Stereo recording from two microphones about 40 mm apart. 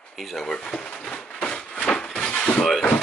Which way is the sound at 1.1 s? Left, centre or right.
Left.